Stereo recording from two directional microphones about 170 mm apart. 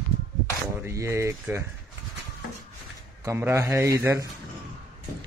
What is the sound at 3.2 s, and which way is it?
A man's voice, 15° right (ahead or behind).